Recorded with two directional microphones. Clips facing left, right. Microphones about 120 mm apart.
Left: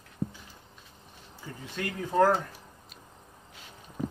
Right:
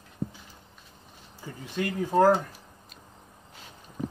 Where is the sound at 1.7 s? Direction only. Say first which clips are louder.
Right 2 dB; 20° right (ahead or behind).